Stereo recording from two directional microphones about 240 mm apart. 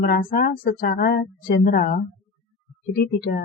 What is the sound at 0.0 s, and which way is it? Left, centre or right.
Speech, left.